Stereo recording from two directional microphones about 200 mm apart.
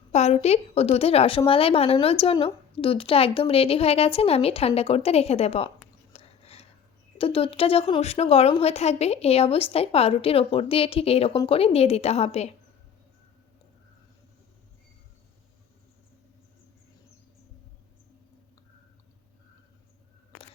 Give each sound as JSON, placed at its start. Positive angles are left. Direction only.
{"t": 0.1, "sound": "a woman's voice", "side_deg": 35}
{"t": 6.1, "sound": "a sound", "side_deg": 30}
{"t": 7.2, "sound": "a woman's voice", "side_deg": 30}